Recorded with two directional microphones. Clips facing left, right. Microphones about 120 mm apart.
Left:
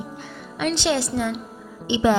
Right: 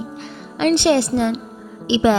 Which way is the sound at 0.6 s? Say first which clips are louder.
Right 7 dB; 55° right (ahead or behind).